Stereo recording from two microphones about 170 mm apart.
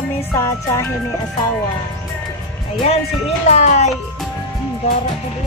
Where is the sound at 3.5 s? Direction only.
40° left (ahead or behind).